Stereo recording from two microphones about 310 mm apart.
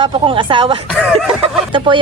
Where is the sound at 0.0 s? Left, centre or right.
Centre.